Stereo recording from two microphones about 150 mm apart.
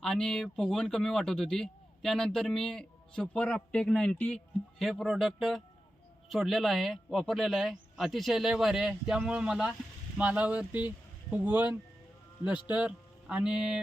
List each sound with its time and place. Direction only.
0.0 s speech: 5° left (ahead or behind)